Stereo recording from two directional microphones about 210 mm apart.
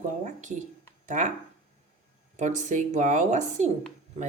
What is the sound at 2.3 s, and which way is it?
Speech, 35° right (ahead or behind).